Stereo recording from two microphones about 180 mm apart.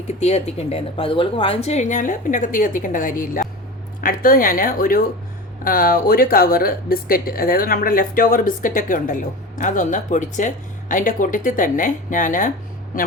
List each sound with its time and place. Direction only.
0.2 s speech: 35° left (ahead or behind)